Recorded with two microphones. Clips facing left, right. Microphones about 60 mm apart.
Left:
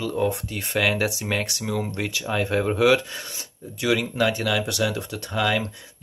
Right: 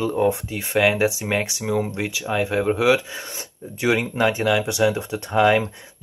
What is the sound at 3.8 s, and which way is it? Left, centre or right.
Speech, right.